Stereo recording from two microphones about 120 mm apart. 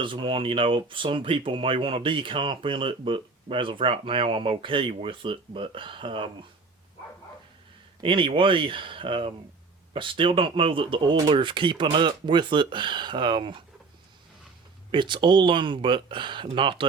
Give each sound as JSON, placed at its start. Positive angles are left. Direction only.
{"t": 0.0, "sound": "speech", "side_deg": -45}
{"t": 8.0, "sound": "speech", "side_deg": -45}
{"t": 14.9, "sound": "speech", "side_deg": -40}